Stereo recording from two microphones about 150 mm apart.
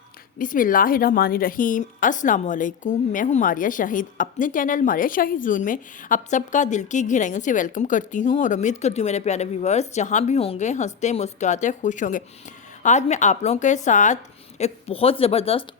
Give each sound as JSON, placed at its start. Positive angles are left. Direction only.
{"t": 0.3, "sound": "a woman's voice", "side_deg": 65}
{"t": 14.6, "sound": "speech", "side_deg": 40}